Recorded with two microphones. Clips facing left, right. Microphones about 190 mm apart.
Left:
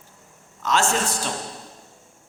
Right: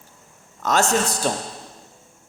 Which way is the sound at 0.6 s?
40° right (ahead or behind).